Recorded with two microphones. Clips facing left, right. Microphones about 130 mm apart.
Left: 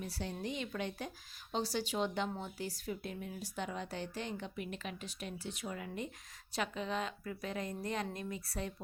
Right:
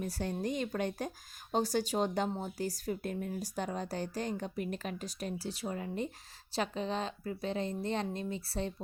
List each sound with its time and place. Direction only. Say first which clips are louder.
0.0 s a woman's voice: right 5 dB; 45° right (ahead or behind); by 8.7 s 30° right (ahead or behind)